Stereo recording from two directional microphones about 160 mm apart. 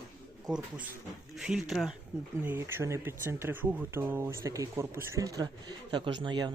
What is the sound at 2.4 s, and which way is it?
Speech, 15° right (ahead or behind).